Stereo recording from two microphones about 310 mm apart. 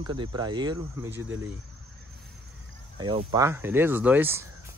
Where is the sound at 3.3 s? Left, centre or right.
Centre.